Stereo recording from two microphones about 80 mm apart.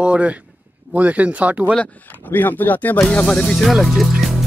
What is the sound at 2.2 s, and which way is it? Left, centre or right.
Speech, left.